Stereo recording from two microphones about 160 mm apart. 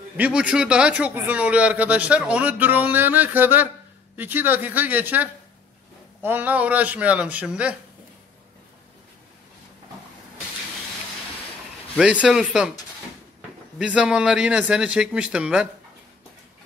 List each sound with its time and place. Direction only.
0.2 s speech: 5° right (ahead or behind)
12.0 s a man's voice: 5° right (ahead or behind)
13.7 s a man's voice: 5° right (ahead or behind)